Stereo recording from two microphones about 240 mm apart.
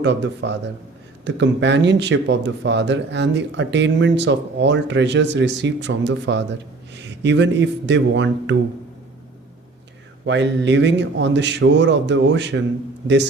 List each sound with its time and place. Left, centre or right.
0.0 s speech: right
10.2 s speech: right